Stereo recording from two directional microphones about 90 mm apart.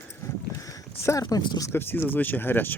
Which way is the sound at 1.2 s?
50° left (ahead or behind).